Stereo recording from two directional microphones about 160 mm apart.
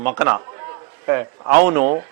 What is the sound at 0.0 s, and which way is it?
Speech, 10° right (ahead or behind).